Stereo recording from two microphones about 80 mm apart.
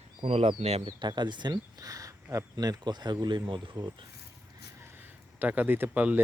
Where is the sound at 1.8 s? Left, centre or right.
Right.